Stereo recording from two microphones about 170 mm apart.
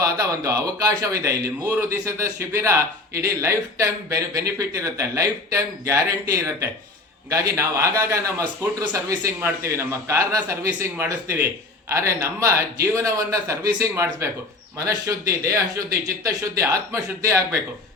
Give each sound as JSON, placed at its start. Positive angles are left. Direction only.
{"t": 0.0, "sound": "a man's voice", "side_deg": -20}